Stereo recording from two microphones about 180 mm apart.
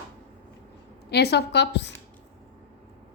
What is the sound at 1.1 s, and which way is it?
Speech, 65° left (ahead or behind).